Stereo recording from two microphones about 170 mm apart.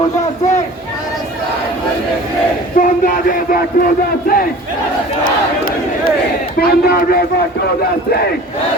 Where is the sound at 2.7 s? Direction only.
50° left (ahead or behind).